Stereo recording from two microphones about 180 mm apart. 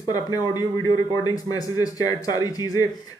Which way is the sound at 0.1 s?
20° left (ahead or behind).